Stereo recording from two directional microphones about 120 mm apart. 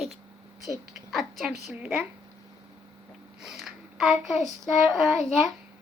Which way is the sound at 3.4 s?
5° right (ahead or behind).